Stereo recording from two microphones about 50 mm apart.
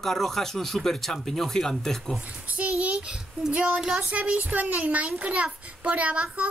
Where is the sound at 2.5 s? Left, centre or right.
Right; by 4.0 s centre.